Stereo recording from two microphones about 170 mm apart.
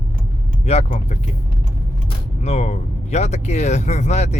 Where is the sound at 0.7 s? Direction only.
40° left (ahead or behind).